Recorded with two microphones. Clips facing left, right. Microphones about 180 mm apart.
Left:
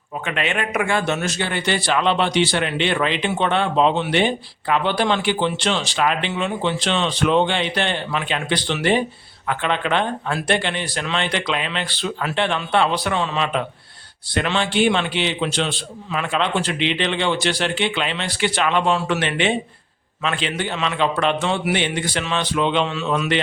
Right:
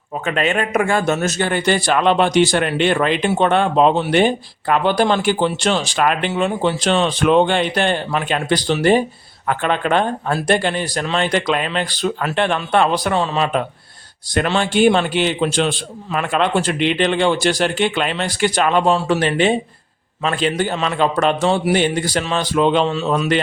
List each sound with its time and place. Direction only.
0.3 s a man's voice: 40° right (ahead or behind)